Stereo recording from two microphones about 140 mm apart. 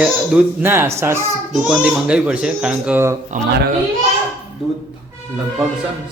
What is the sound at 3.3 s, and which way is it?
Speech, 65° right (ahead or behind).